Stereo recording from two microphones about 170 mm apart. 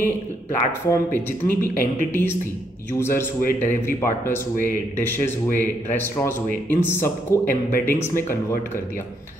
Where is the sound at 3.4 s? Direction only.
60° left (ahead or behind).